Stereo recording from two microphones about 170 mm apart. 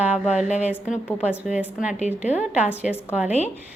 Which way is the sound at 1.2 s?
5° right (ahead or behind).